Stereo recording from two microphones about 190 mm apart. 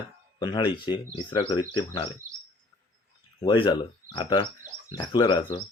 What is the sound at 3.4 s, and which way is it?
Speech, 25° left (ahead or behind).